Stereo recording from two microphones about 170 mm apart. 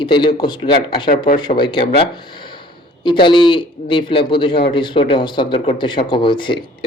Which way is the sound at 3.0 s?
30° left (ahead or behind).